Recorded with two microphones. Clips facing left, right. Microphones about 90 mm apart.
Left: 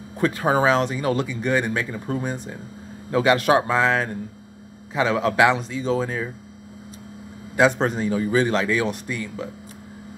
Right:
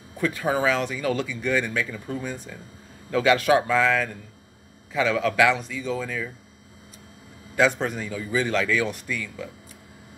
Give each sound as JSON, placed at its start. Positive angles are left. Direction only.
{"t": 0.2, "sound": "speech", "side_deg": 40}
{"t": 0.7, "sound": "a man's voice", "side_deg": 25}
{"t": 2.3, "sound": "a man's voice", "side_deg": 25}
{"t": 7.5, "sound": "a man's voice", "side_deg": 20}
{"t": 7.8, "sound": "speech", "side_deg": 30}
{"t": 8.2, "sound": "speech", "side_deg": 45}
{"t": 8.5, "sound": "a man's voice", "side_deg": 25}